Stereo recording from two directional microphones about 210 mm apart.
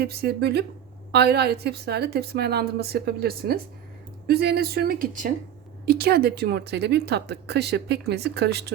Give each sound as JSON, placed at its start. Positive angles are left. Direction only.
{"t": 0.0, "sound": "speech", "side_deg": -50}